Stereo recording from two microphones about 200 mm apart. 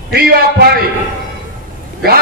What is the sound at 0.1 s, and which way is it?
Speech, 50° right (ahead or behind).